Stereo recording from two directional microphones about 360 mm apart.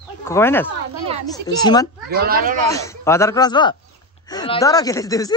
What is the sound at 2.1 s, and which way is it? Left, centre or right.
Speech, right.